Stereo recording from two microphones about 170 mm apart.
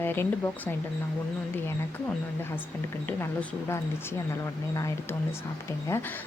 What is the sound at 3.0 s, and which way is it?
Speech, 10° left (ahead or behind).